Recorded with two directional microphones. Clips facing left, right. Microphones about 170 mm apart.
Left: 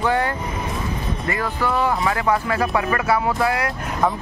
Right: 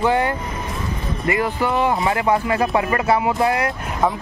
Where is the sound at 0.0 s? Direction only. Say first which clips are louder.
Right 2 dB; 15° right (ahead or behind).